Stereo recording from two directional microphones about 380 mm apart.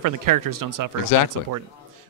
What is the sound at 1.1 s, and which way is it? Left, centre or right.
Speech, left.